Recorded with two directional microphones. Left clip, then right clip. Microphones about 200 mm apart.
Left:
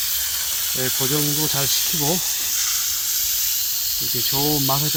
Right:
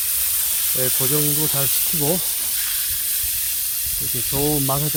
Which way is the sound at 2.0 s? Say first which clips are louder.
Left 1 dB; 20° right (ahead or behind).